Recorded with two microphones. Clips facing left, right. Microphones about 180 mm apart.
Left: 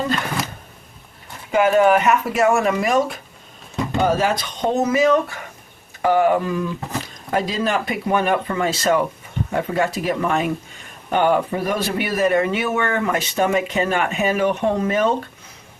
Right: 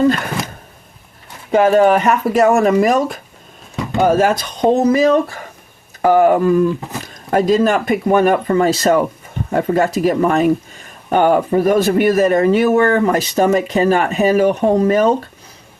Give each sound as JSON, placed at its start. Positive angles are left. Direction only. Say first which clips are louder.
{"t": 1.5, "sound": "a man's voice", "louder": "right 4 dB", "side_deg": -35}
{"t": 4.7, "sound": "a man's voice", "louder": "right 4 dB", "side_deg": -35}